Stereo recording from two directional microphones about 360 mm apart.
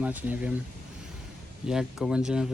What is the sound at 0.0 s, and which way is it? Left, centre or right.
Speech, centre.